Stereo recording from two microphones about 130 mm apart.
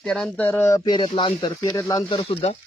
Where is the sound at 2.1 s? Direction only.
40° left (ahead or behind).